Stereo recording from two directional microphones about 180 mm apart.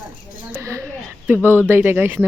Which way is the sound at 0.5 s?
15° right (ahead or behind).